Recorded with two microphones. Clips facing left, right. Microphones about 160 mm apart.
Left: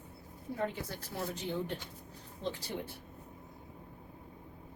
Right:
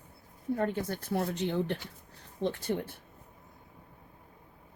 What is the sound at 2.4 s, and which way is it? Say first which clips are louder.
Speech: right 7 dB; 55° right (ahead or behind).